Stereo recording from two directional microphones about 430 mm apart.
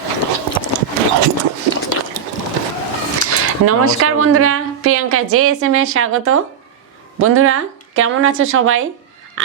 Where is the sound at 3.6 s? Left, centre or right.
Right.